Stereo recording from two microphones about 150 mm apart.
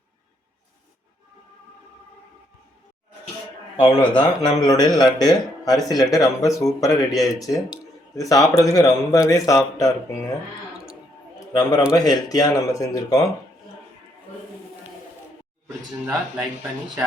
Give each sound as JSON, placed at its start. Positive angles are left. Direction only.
{"t": 3.8, "sound": "a man's voice", "side_deg": 30}
{"t": 11.3, "sound": "a sound", "side_deg": 25}
{"t": 11.9, "sound": "a man's voice", "side_deg": 25}